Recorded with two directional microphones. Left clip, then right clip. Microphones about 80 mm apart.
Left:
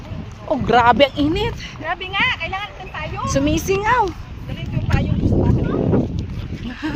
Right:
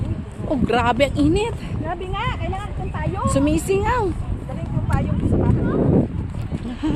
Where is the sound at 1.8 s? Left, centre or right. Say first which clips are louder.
Left 4 dB; left.